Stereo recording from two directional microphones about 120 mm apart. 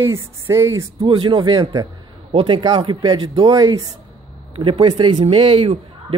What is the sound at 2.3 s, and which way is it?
Speech, 50° right (ahead or behind).